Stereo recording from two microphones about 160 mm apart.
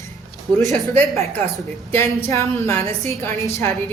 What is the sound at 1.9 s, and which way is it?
A woman's voice, 15° left (ahead or behind).